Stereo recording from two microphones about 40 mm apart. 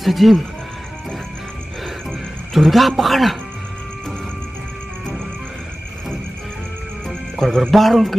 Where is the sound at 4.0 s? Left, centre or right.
Centre.